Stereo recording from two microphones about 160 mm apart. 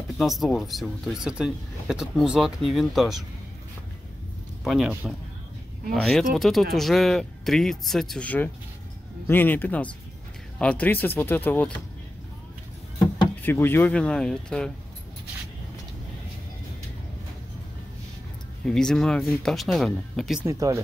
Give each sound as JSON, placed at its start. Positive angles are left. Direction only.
{"t": 0.1, "sound": "speech", "side_deg": 0}
{"t": 4.6, "sound": "speech", "side_deg": -5}
{"t": 13.4, "sound": "speech", "side_deg": 15}
{"t": 18.7, "sound": "speech", "side_deg": 5}
{"t": 20.4, "sound": "speech", "side_deg": -20}